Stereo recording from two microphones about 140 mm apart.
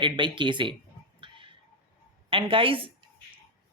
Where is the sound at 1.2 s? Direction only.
40° right (ahead or behind).